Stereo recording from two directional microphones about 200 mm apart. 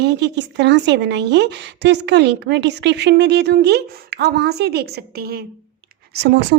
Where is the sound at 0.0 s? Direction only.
60° right (ahead or behind).